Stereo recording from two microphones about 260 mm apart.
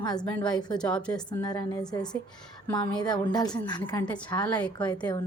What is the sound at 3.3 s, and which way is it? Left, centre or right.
A woman's voice, centre.